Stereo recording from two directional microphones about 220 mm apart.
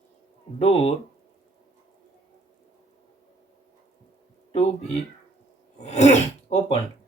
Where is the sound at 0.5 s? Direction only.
30° left (ahead or behind).